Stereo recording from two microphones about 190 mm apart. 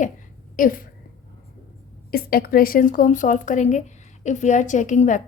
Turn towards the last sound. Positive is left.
turn(degrees=40)  # may be behind; listen again after turning